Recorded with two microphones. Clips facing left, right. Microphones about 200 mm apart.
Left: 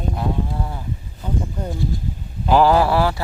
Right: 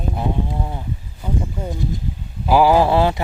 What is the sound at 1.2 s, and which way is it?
Speech, 5° right (ahead or behind).